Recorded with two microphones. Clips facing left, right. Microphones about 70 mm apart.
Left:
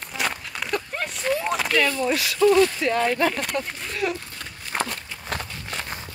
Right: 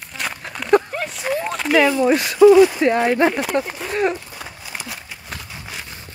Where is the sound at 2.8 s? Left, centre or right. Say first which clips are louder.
Right 7 dB; right.